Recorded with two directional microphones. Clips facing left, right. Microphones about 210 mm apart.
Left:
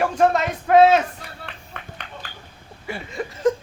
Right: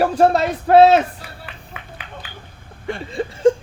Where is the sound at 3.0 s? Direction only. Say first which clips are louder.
Right 5 dB; 30° right (ahead or behind).